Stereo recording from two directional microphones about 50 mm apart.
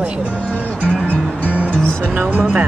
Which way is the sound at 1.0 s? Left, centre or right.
Left.